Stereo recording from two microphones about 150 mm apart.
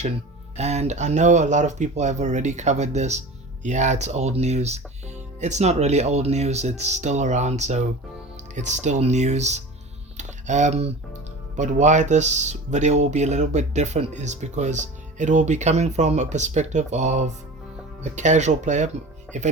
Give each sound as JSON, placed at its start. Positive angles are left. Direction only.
{"t": 0.5, "sound": "speech", "side_deg": -45}
{"t": 10.2, "sound": "a sound", "side_deg": -55}
{"t": 11.5, "sound": "speech", "side_deg": -55}